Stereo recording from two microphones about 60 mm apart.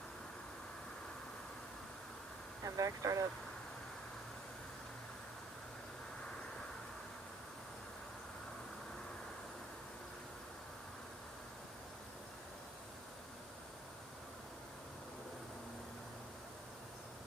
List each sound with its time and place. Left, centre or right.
2.6 s speech: right